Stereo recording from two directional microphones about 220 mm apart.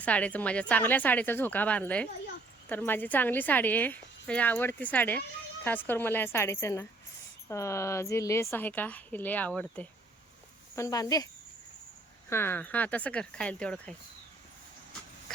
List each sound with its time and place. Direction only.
0.0 s a woman's voice: 5° left (ahead or behind)
12.3 s a woman's voice: 10° left (ahead or behind)